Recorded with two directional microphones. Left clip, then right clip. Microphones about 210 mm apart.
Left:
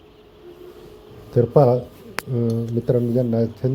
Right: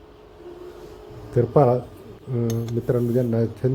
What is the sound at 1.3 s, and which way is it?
Speech, 15° left (ahead or behind).